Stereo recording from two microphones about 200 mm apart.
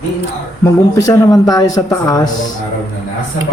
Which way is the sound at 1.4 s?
20° left (ahead or behind).